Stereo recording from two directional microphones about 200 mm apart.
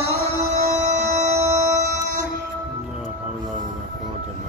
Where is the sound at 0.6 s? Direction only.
35° right (ahead or behind).